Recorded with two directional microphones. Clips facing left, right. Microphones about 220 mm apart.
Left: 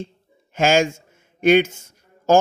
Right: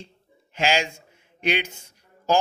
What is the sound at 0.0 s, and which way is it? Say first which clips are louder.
Speech: left 11 dB; 50° left (ahead or behind).